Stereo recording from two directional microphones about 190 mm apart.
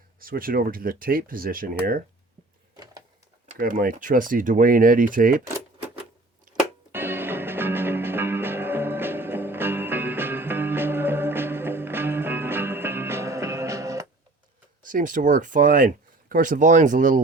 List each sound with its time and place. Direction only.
0.2 s speech: 50° right (ahead or behind)
2.7 s printer: 20° right (ahead or behind)
3.6 s speech: 50° right (ahead or behind)
6.9 s music: 10° right (ahead or behind)
14.8 s speech: 45° right (ahead or behind)